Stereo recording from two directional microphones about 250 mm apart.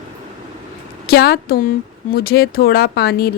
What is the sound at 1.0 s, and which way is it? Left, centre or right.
A woman's voice, left.